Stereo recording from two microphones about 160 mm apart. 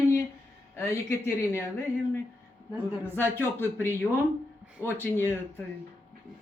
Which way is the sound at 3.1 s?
15° left (ahead or behind).